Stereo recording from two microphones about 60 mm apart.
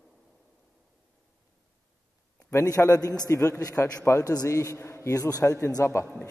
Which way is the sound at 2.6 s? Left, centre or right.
Left.